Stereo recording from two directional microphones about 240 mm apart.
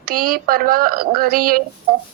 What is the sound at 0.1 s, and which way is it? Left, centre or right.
Speech, right.